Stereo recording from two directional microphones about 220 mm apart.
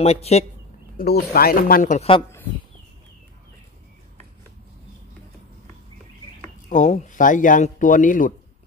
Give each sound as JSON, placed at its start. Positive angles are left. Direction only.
{"t": 0.0, "sound": "speech", "side_deg": 30}
{"t": 1.3, "sound": "speech", "side_deg": 45}
{"t": 6.7, "sound": "speech", "side_deg": 35}